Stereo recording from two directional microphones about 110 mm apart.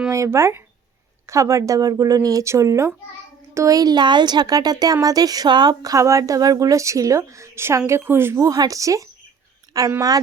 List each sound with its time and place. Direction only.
0.1 s speech: 25° right (ahead or behind)